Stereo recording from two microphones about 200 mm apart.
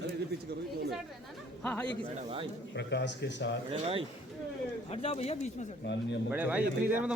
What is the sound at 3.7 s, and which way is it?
Speech, 30° right (ahead or behind).